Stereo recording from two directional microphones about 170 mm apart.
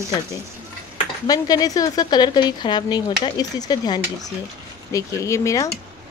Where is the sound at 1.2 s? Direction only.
25° left (ahead or behind).